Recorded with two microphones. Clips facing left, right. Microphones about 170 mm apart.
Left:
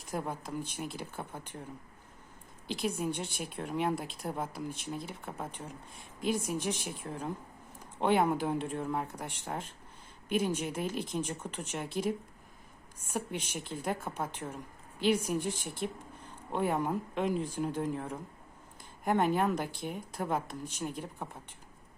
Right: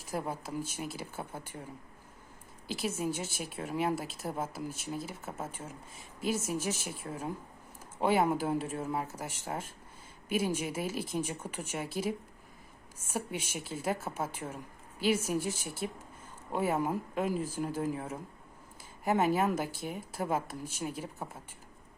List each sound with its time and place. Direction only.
0.0 s a woman's voice: 5° right (ahead or behind)
2.6 s a woman's voice: 5° right (ahead or behind)